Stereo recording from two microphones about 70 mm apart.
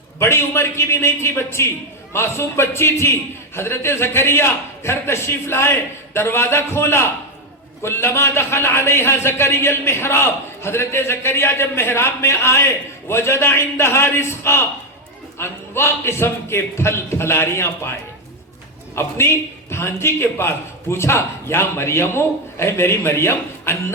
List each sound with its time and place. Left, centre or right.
0.2 s a man's voice: left
18.9 s a man's voice: left